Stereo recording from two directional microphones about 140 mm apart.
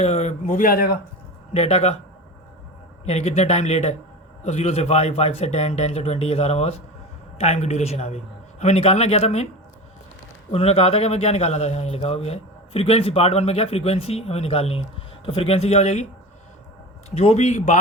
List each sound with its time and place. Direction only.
0.0 s a man's voice: 50° left (ahead or behind); by 0.9 s 90° left
1.5 s a man's voice: 50° left (ahead or behind)
3.1 s a man's voice: 50° left (ahead or behind)
10.5 s a man's voice: 45° left (ahead or behind)
17.2 s a man's voice: 50° left (ahead or behind)